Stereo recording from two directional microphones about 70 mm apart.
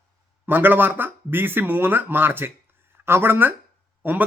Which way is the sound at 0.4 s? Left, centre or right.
Right.